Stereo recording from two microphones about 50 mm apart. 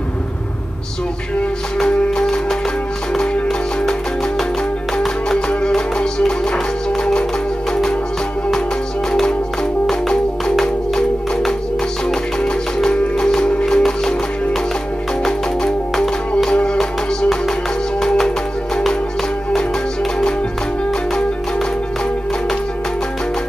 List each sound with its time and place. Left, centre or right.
4.9 s music: centre
9.8 s music: centre
18.0 s music: centre